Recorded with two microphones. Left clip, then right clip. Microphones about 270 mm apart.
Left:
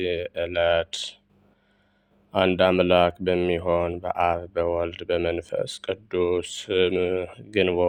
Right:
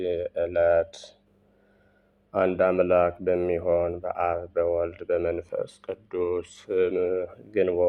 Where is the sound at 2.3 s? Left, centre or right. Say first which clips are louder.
Left 2 dB; left.